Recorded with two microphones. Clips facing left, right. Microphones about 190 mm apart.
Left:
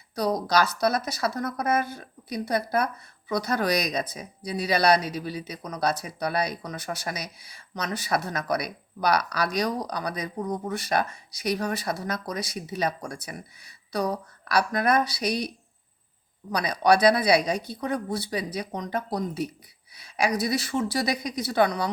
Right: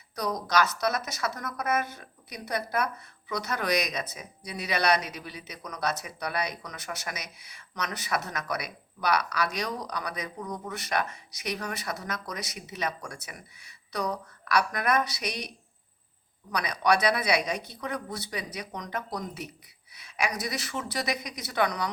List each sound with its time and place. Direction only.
0.2 s a woman's voice: 30° left (ahead or behind)